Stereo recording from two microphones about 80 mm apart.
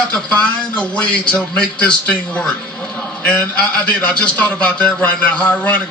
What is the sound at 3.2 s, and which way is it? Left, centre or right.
A man's voice, centre.